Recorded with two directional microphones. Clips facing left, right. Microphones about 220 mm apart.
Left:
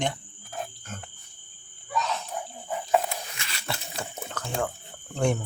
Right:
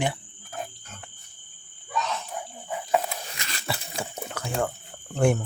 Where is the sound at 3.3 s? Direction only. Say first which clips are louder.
Right 2 dB; 40° right (ahead or behind).